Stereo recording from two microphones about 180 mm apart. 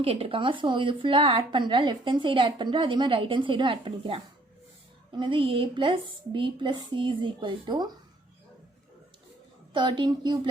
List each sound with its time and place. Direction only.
0.0 s speech: 30° right (ahead or behind)
9.7 s speech: 25° right (ahead or behind)